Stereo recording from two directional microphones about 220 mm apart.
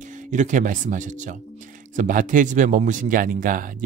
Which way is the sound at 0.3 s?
35° right (ahead or behind).